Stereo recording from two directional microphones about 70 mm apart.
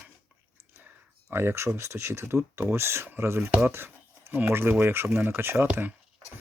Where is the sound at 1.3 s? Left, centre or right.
Right.